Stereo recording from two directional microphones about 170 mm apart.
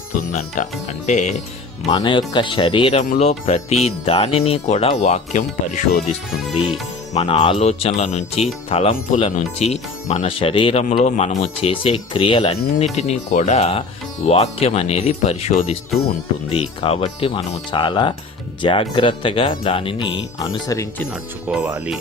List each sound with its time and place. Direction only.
0.3 s speech: 45° left (ahead or behind)
1.9 s speech: 25° left (ahead or behind)
9.0 s speech: 50° left (ahead or behind); by 20.1 s 30° left (ahead or behind)
20.7 s speech: 20° left (ahead or behind)
21.5 s speech: 5° right (ahead or behind)